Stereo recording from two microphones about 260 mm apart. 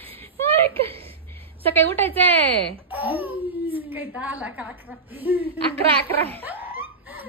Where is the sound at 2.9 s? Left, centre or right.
Centre.